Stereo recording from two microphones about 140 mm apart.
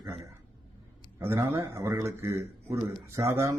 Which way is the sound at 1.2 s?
15° right (ahead or behind).